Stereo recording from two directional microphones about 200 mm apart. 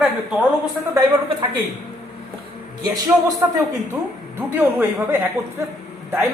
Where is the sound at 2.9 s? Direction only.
15° right (ahead or behind).